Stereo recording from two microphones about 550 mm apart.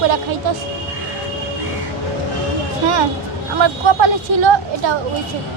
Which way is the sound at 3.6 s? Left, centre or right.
Right.